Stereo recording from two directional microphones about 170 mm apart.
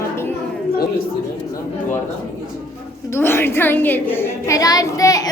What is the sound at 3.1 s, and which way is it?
A woman's voice, 15° left (ahead or behind).